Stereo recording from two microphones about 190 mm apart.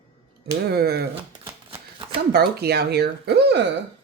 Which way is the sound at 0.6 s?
55° right (ahead or behind).